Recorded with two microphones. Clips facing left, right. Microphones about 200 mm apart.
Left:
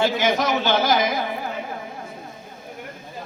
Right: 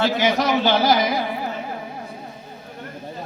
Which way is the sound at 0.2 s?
50° left (ahead or behind).